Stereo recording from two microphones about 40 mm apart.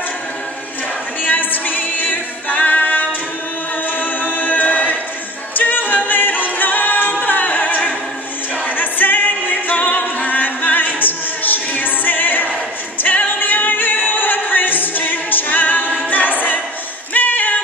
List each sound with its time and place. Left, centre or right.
1.2 s a capella: left
4.0 s music: left
5.5 s a capella: left
8.6 s music: left